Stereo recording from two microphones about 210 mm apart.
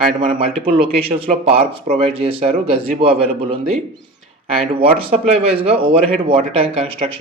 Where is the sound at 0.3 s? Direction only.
30° right (ahead or behind).